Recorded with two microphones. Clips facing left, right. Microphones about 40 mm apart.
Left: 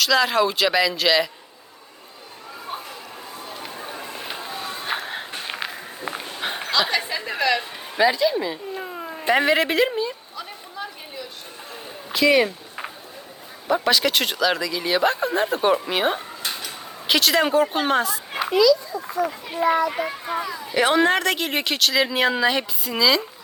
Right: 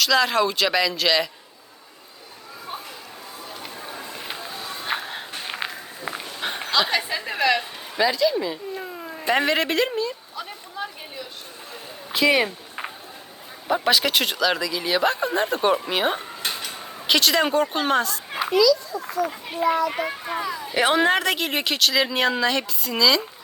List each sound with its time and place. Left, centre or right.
0.0 s speech: centre
3.8 s a sound: left
4.1 s run: centre
4.4 s music: left
4.9 s walk: centre
6.4 s a sound: centre
6.7 s a woman's voice: centre
7.9 s speech: centre
12.1 s a sound: centre
13.7 s speech: centre
19.9 s speech: centre